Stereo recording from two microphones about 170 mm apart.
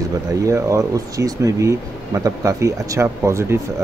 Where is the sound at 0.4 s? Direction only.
20° right (ahead or behind).